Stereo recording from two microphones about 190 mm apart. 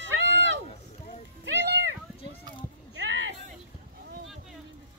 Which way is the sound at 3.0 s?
70° right (ahead or behind).